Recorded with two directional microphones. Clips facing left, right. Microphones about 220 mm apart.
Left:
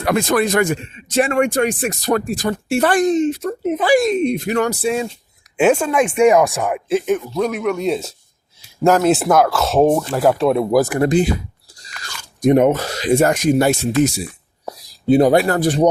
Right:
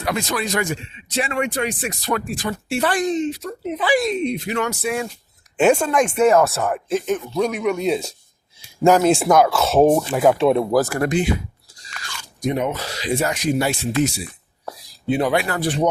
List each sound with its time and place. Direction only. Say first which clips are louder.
0.0 s a man's voice: left 7 dB; 55° left (ahead or behind); by 5.1 s 25° left (ahead or behind)
5.5 s speech: left 1 dB; 5° left (ahead or behind)
10.7 s speech: left 3 dB; 15° left (ahead or behind)
11.1 s speech: left 4 dB; 40° left (ahead or behind)
12.4 s a man's voice: left 9 dB; 50° left (ahead or behind)